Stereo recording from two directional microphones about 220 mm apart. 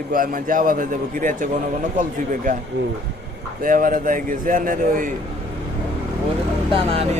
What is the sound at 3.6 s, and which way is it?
A man's voice, 40° right (ahead or behind).